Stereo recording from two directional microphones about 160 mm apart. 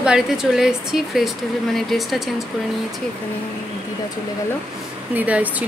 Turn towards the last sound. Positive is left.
turn(degrees=-10)  # may be behind; listen again after turning